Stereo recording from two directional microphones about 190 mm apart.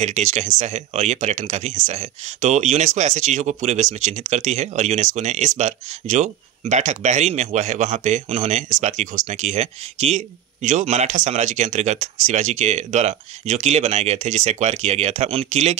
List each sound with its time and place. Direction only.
0.0 s speech: 40° right (ahead or behind)